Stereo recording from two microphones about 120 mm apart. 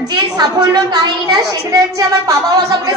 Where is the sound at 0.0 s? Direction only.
35° right (ahead or behind).